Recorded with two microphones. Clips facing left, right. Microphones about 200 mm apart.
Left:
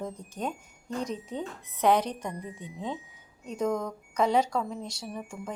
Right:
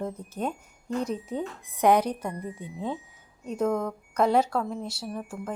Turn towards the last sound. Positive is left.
turn(degrees=0)  # may be behind; listen again after turning